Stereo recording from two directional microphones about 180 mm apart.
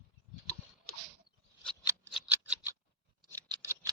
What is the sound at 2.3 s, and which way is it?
Scissors, 5° right (ahead or behind).